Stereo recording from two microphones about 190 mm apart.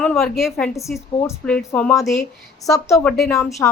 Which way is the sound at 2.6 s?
15° left (ahead or behind).